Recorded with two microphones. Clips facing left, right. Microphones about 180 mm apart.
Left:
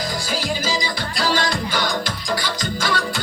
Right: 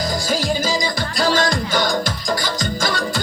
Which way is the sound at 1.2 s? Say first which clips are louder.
Right 3 dB; 45° right (ahead or behind).